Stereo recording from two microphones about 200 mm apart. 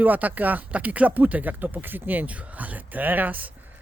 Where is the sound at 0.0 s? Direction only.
10° right (ahead or behind).